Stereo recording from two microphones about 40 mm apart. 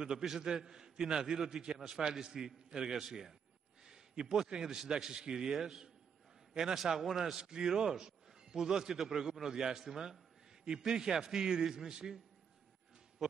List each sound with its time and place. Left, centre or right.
0.2 s a man's voice: centre
7.0 s a man's voice: centre
13.2 s a sound: centre